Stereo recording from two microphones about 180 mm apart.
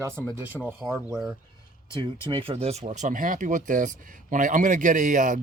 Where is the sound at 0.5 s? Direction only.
10° right (ahead or behind).